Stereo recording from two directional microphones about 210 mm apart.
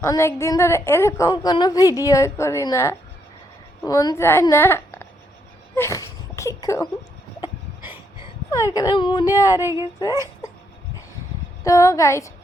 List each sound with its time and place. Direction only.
0.0 s a woman's voice: 15° left (ahead or behind)
5.7 s a sound: 15° left (ahead or behind)
8.4 s a woman's voice: 15° left (ahead or behind)
11.6 s a woman's voice: 15° left (ahead or behind)